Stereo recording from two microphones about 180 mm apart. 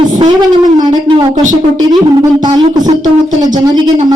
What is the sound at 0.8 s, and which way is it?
Speech, 25° right (ahead or behind).